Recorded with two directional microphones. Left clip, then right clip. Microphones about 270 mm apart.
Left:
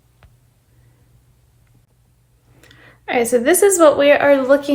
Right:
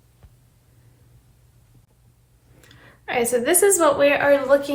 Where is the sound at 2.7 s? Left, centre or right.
Left.